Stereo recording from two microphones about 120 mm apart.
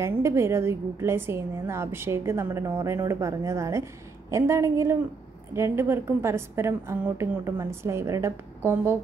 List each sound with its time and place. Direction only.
0.0 s a woman's voice: 25° right (ahead or behind)